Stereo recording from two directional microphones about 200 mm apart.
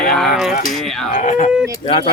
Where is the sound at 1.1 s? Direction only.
35° left (ahead or behind).